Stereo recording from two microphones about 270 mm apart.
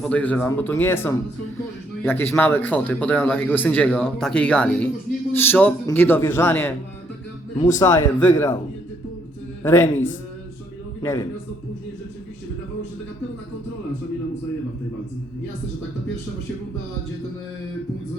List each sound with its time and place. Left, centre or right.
0.0 s a man's voice: centre
9.6 s speech: centre
11.0 s speech: centre